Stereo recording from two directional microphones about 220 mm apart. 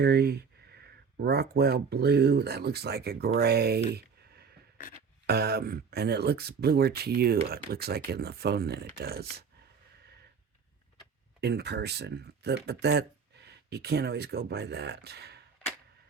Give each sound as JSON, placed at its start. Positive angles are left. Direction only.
{"t": 0.0, "sound": "speech", "side_deg": -45}
{"t": 11.3, "sound": "speech", "side_deg": -50}